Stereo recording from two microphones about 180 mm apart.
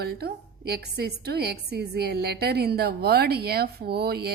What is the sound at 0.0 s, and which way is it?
A woman's voice, 65° right (ahead or behind).